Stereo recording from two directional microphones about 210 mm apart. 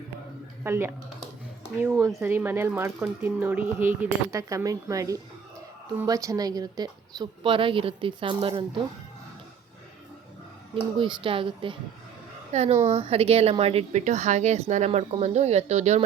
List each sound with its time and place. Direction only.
0.6 s a woman's voice: 10° right (ahead or behind); by 8.6 s 25° right (ahead or behind)
10.9 s a woman's voice: 25° right (ahead or behind)